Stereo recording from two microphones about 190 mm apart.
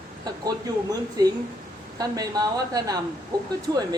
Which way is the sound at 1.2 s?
20° right (ahead or behind).